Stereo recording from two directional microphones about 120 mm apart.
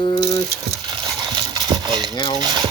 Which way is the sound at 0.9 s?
35° right (ahead or behind).